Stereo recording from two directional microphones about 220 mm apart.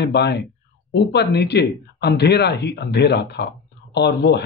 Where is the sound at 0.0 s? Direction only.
50° left (ahead or behind).